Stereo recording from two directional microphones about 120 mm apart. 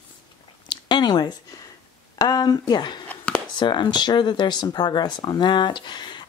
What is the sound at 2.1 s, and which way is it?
Speech, 30° left (ahead or behind).